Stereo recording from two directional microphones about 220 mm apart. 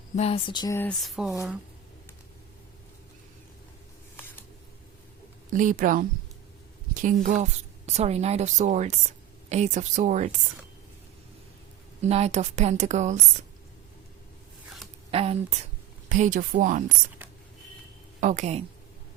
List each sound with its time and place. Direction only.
0.2 s speech: 25° left (ahead or behind); by 1.3 s centre (ahead or behind)
1.3 s speech: 15° right (ahead or behind)
5.5 s a woman's voice: 35° right (ahead or behind)
12.0 s a woman's voice: 30° right (ahead or behind)
15.1 s a woman's voice: 25° right (ahead or behind)
18.2 s a woman's voice: 35° right (ahead or behind)